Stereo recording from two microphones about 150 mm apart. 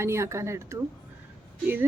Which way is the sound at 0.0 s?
20° right (ahead or behind).